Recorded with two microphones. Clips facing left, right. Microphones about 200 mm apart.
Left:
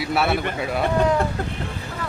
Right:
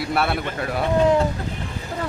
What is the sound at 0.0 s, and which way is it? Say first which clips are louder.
Speech: left 1 dB; centre (ahead or behind).